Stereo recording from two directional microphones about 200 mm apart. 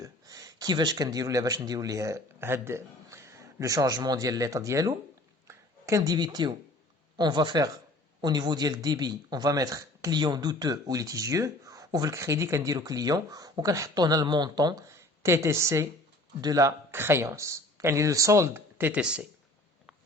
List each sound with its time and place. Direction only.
0.0 s speech: 15° right (ahead or behind)
5.5 s a sound: 15° right (ahead or behind)
7.2 s speech: 20° right (ahead or behind); by 19.3 s 5° right (ahead or behind)